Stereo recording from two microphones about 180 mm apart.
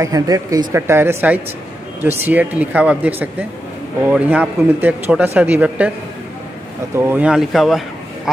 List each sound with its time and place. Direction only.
0.0 s speech: 20° right (ahead or behind)
7.0 s speech: 10° right (ahead or behind)